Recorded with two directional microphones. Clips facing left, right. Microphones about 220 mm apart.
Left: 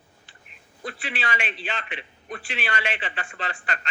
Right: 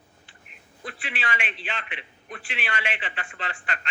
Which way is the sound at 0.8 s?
35° left (ahead or behind).